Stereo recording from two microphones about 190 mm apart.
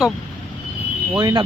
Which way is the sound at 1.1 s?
20° right (ahead or behind).